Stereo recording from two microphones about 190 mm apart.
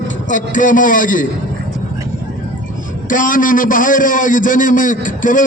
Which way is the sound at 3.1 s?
45° left (ahead or behind).